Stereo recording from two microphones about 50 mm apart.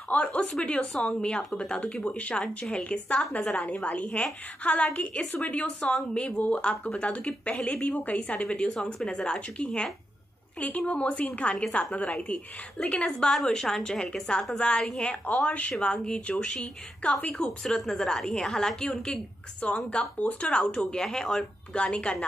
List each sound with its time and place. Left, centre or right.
0.1 s a woman's voice: left
1.8 s a woman's voice: left
8.4 s a woman's voice: centre
10.6 s a woman's voice: left
13.3 s a woman's voice: centre
14.6 s a woman's voice: centre
17.6 s a woman's voice: centre
20.8 s a woman's voice: centre
21.7 s a woman's voice: left